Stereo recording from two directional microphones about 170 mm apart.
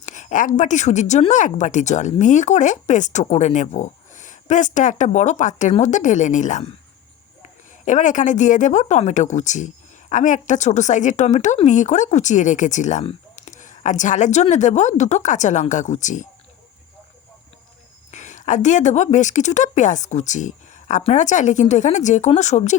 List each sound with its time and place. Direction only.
0.0 s speech: 45° left (ahead or behind)
7.9 s speech: 45° left (ahead or behind)
18.1 s speech: 45° left (ahead or behind)